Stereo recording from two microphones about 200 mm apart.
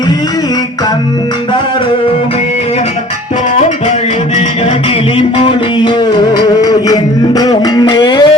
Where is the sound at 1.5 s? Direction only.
25° left (ahead or behind).